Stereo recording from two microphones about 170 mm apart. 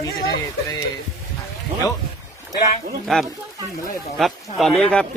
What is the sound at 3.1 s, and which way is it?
Speech, centre (ahead or behind).